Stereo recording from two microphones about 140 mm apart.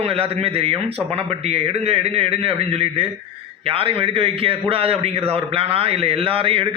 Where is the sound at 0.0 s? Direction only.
45° right (ahead or behind).